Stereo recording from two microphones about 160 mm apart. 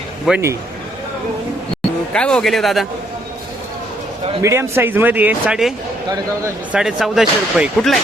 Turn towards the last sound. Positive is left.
turn(degrees=0)  # may be behind; listen again after turning